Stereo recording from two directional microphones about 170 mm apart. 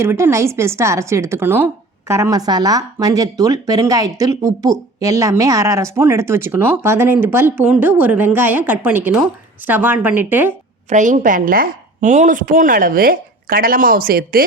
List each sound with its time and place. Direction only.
0.0 s a woman's voice: 15° right (ahead or behind)
10.8 s a woman's voice: 45° right (ahead or behind)